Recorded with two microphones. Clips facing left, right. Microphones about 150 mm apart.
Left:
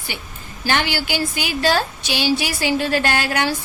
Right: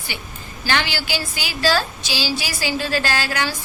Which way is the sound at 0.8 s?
55° left (ahead or behind).